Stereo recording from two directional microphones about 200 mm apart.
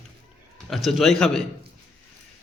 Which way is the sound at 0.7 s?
Centre (ahead or behind).